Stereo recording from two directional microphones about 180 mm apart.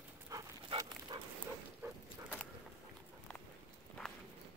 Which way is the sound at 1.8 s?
10° right (ahead or behind).